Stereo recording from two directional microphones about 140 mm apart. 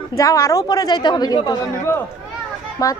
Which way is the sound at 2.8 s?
25° left (ahead or behind).